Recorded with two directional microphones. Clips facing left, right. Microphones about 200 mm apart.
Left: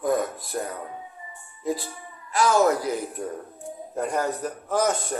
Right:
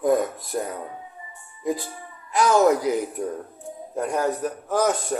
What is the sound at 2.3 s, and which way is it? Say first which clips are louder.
Speech: right 2 dB; 20° right (ahead or behind).